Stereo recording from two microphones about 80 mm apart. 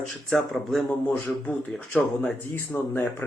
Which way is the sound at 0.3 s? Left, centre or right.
Centre.